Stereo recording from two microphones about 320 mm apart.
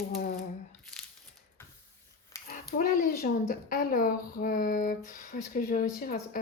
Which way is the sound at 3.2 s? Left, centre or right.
Left.